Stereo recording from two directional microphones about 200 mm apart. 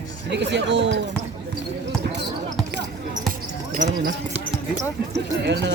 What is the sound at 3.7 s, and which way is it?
Speech, 40° right (ahead or behind).